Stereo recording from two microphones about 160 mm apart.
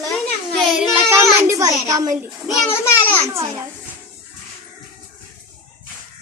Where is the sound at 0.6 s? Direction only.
5° right (ahead or behind); by 2.1 s 20° right (ahead or behind).